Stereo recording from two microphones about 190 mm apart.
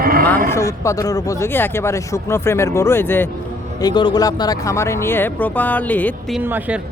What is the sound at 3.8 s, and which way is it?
Speech, 20° left (ahead or behind).